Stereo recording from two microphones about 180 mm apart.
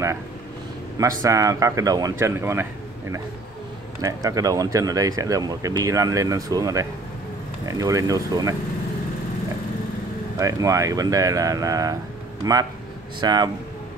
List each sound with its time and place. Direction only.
1.2 s speech: 20° right (ahead or behind)
10.4 s speech: 20° right (ahead or behind)